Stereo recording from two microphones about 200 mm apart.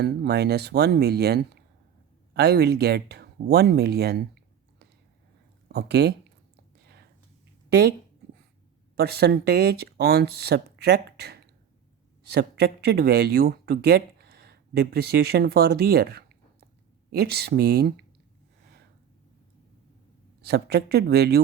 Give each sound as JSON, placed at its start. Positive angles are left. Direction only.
{"t": 0.0, "sound": "speech", "side_deg": -55}
{"t": 5.6, "sound": "speech", "side_deg": -55}
{"t": 6.8, "sound": "whispering", "side_deg": -55}
{"t": 9.0, "sound": "speech", "side_deg": -50}
{"t": 20.4, "sound": "speech", "side_deg": -55}